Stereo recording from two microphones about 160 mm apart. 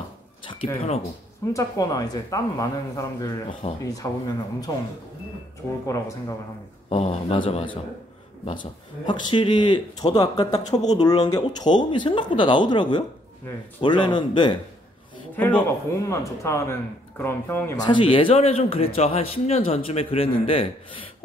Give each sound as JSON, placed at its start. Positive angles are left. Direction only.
{"t": 0.7, "sound": "a man's voice", "side_deg": 40}
{"t": 1.5, "sound": "speech", "side_deg": 20}
{"t": 5.9, "sound": "speech", "side_deg": 20}
{"t": 6.9, "sound": "a man's voice", "side_deg": 35}
{"t": 9.0, "sound": "a man's voice", "side_deg": 30}
{"t": 15.3, "sound": "speech", "side_deg": 10}
{"t": 17.8, "sound": "a man's voice", "side_deg": 35}